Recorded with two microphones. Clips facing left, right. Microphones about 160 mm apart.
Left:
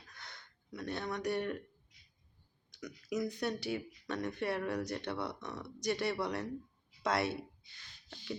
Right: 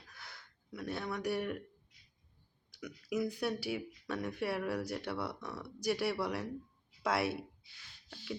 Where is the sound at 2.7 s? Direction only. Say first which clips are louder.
Right 1 dB; 10° right (ahead or behind).